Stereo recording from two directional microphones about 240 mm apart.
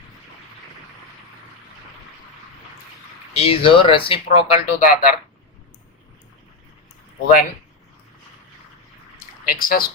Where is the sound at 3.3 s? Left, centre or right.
Left.